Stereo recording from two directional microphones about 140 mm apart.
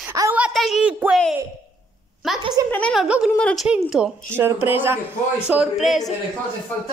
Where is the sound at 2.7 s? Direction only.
10° left (ahead or behind).